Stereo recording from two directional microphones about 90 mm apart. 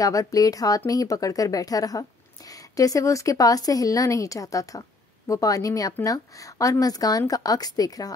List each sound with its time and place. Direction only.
0.0 s a woman's voice: 40° left (ahead or behind)